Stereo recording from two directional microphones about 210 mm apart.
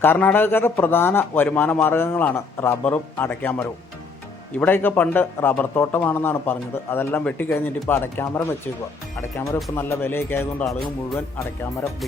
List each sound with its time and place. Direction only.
0.0 s a man's voice: 10° left (ahead or behind)
9.7 s a man's voice: 10° left (ahead or behind)